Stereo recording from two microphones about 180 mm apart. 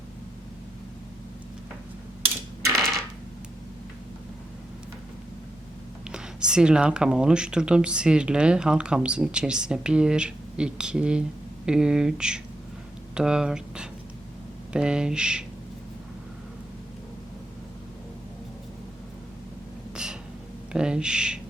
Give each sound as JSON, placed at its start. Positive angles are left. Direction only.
{"t": 6.1, "sound": "speech", "side_deg": -5}
{"t": 20.0, "sound": "a sound", "side_deg": -5}
{"t": 20.7, "sound": "speech", "side_deg": -5}